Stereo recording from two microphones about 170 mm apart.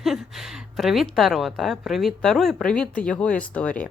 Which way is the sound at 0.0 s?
Centre (ahead or behind).